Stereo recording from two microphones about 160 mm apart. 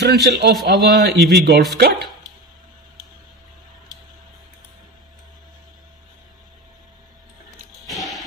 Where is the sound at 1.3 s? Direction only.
90° right.